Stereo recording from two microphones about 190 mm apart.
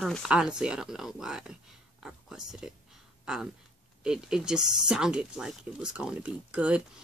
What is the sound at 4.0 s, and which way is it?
Speech, 5° right (ahead or behind).